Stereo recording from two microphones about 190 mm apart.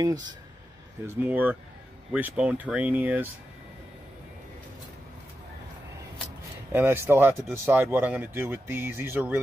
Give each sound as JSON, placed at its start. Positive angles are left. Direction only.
{"t": 0.0, "sound": "speech", "side_deg": -20}
{"t": 6.7, "sound": "speech", "side_deg": -10}